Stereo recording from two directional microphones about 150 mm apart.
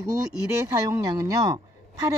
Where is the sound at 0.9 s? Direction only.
25° right (ahead or behind).